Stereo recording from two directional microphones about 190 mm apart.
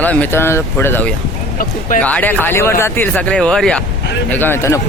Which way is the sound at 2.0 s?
10° left (ahead or behind).